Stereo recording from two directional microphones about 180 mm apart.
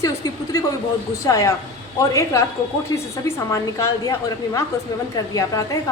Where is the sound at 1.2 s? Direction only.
20° left (ahead or behind).